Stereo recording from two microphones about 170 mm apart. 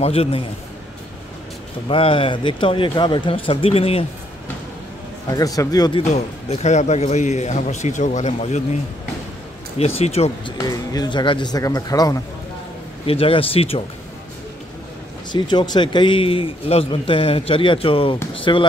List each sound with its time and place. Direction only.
0.0 s speech: 35° left (ahead or behind)
1.9 s speech: 30° left (ahead or behind)
5.3 s speech: 20° left (ahead or behind)
6.1 s a man's voice: 40° left (ahead or behind)
9.8 s speech: 35° left (ahead or behind)
10.6 s speech: 20° left (ahead or behind)
13.0 s speech: 35° left (ahead or behind)
15.3 s speech: 25° left (ahead or behind)